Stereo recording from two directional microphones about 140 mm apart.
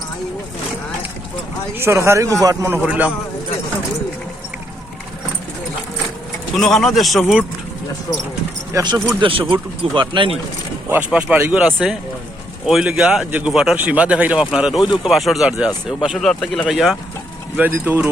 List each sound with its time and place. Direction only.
1.8 s speech: 20° right (ahead or behind)
2.7 s a man's voice: 10° right (ahead or behind)
6.6 s speech: 5° left (ahead or behind)
8.7 s speech: 30° right (ahead or behind)
10.8 s a man's voice: 10° right (ahead or behind)
17.6 s a man's voice: 15° right (ahead or behind)